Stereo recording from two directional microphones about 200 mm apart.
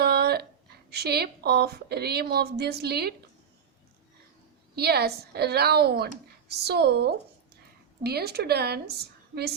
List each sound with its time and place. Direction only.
0.0 s a sound: 50° right (ahead or behind)
0.9 s speech: 55° right (ahead or behind)
4.7 s speech: 50° right (ahead or behind)